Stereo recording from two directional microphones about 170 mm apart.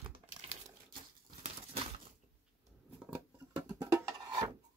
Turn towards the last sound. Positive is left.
turn(degrees=-20)  # may be behind; listen again after turning